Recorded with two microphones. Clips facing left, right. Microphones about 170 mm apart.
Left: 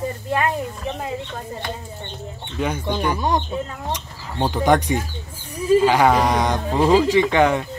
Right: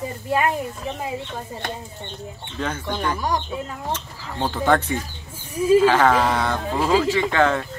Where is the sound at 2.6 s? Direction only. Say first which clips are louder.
Left 3 dB; 15° left (ahead or behind).